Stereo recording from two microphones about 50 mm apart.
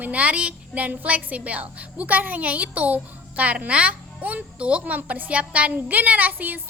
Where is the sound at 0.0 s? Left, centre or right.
Right.